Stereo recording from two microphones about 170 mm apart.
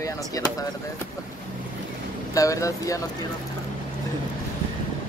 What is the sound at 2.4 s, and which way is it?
Speech, 20° left (ahead or behind).